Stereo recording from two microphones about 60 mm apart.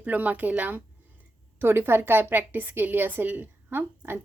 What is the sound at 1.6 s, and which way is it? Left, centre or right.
A woman's voice, right.